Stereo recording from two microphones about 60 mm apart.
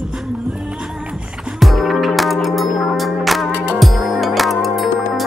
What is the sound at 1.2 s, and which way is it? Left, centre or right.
Music, centre.